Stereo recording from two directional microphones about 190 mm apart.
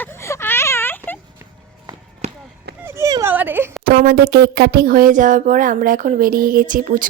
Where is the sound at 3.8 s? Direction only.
50° right (ahead or behind).